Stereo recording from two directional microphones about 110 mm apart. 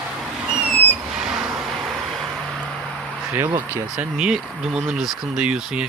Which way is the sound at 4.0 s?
10° right (ahead or behind).